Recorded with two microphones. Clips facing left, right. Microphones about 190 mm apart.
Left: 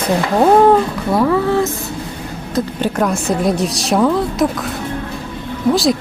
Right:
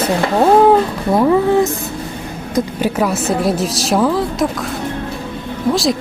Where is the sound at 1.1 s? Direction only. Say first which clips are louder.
Right 2 dB; 20° right (ahead or behind).